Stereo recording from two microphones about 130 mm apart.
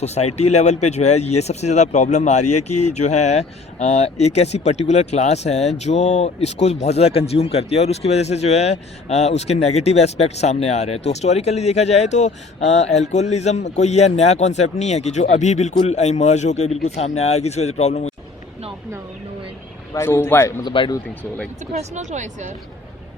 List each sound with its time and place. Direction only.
0.0 s speech: 55° left (ahead or behind)
19.9 s speech: 20° left (ahead or behind)
20.7 s speech: 35° left (ahead or behind)
21.6 s speech: 65° right (ahead or behind)